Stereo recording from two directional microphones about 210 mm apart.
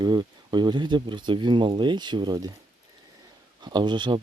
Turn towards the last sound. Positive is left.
turn(degrees=-20)  # may be behind; listen again after turning